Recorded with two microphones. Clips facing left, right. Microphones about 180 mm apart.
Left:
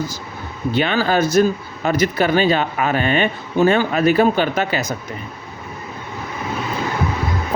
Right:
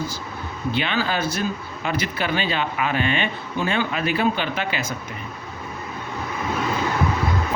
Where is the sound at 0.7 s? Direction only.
45° left (ahead or behind).